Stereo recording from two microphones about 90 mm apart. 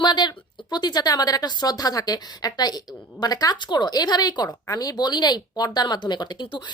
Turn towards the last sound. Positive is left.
turn(degrees=55)  # may be behind; listen again after turning